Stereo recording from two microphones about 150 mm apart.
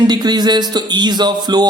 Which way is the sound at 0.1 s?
30° right (ahead or behind).